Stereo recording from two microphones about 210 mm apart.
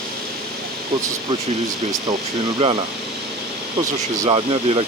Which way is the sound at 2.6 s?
25° right (ahead or behind).